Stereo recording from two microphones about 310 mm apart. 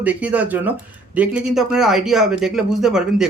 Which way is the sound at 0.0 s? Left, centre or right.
Centre.